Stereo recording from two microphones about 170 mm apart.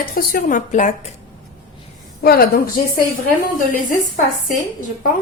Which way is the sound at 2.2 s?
65° left (ahead or behind).